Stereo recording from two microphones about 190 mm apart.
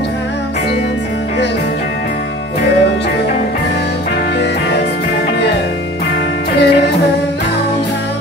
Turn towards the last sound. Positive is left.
turn(degrees=60)  # may be behind; listen again after turning